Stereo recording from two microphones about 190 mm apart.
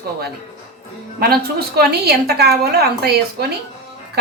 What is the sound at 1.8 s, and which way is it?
A woman's voice, 55° right (ahead or behind).